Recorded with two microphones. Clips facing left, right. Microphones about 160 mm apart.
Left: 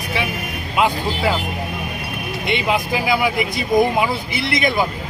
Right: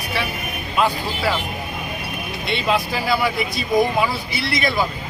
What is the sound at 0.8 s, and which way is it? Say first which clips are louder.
Speech: left 2 dB; 15° left (ahead or behind).